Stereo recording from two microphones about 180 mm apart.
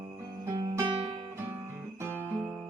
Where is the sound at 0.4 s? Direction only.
20° right (ahead or behind).